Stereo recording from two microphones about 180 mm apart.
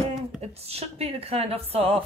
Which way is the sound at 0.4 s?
35° right (ahead or behind).